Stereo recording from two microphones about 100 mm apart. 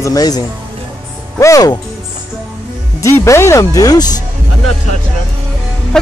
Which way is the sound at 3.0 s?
30° left (ahead or behind).